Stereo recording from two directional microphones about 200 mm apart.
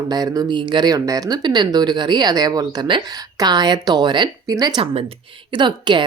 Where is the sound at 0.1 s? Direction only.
20° right (ahead or behind).